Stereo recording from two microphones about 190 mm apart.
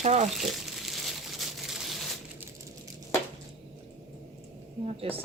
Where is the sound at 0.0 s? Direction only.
35° right (ahead or behind).